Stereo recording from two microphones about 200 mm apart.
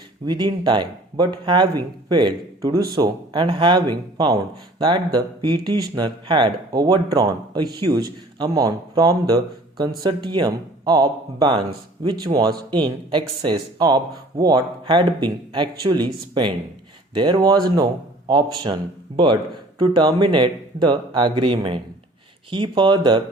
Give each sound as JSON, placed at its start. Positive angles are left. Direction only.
{"t": 0.3, "sound": "speech", "side_deg": -20}